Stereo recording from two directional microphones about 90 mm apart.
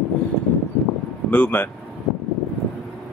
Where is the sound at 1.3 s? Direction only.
20° left (ahead or behind).